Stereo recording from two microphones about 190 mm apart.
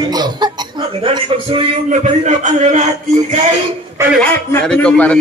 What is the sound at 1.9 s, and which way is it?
Speech, 40° right (ahead or behind).